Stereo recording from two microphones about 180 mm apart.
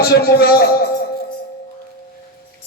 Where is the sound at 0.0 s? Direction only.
60° left (ahead or behind).